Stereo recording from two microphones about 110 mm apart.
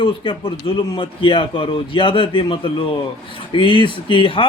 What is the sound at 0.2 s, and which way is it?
A man's voice, 45° left (ahead or behind).